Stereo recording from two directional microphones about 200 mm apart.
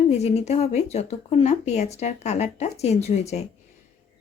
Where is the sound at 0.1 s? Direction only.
30° left (ahead or behind).